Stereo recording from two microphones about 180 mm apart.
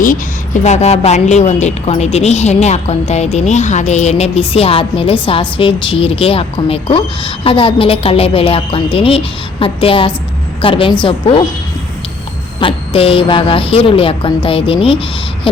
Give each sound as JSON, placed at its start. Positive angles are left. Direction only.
{"t": 0.0, "sound": "a woman's voice", "side_deg": 45}
{"t": 12.5, "sound": "a woman's voice", "side_deg": 30}